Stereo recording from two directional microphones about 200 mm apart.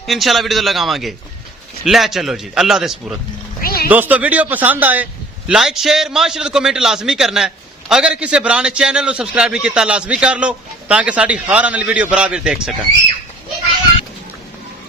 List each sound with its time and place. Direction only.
0.0 s a man's voice: centre (ahead or behind)
3.6 s a sound: 45° left (ahead or behind)
3.8 s a man's voice: 10° right (ahead or behind)